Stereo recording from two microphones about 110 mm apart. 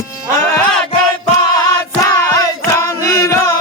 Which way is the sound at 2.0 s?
30° left (ahead or behind).